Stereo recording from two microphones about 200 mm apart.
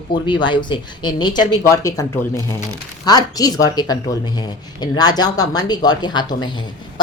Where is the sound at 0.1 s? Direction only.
20° left (ahead or behind).